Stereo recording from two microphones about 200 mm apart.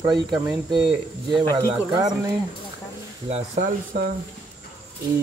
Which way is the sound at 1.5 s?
20° right (ahead or behind).